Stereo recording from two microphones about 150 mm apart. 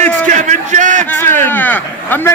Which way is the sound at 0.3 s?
55° right (ahead or behind).